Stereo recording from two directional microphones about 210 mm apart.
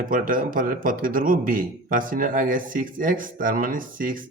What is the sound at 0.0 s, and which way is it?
A man's voice, 40° right (ahead or behind).